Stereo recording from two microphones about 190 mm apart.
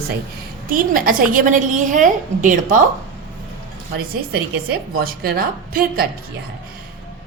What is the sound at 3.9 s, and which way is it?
A woman's voice, 50° right (ahead or behind).